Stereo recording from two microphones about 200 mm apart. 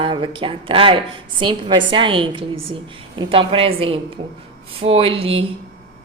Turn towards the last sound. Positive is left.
turn(degrees=-30)  # may be behind; listen again after turning